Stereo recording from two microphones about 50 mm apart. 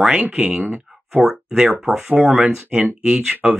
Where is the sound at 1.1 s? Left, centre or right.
Centre.